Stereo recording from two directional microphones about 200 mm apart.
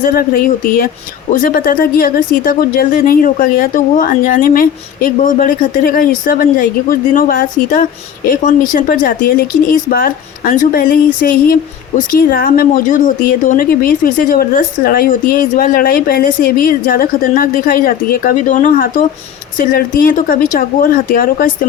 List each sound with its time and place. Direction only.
0.0 s a woman's voice: 45° left (ahead or behind)